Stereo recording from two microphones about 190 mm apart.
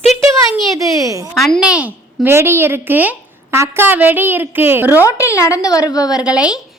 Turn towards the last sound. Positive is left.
turn(degrees=-5)  # may be behind; listen again after turning